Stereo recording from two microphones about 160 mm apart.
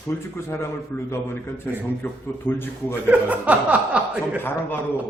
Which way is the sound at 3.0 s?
10° right (ahead or behind).